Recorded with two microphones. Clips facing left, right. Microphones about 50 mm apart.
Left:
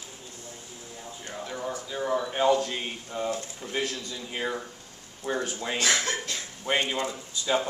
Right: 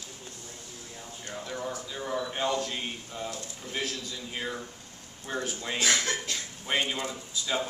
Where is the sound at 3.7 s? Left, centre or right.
Centre.